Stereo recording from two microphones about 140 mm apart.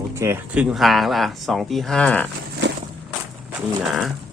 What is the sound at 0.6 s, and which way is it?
Speech, 5° right (ahead or behind).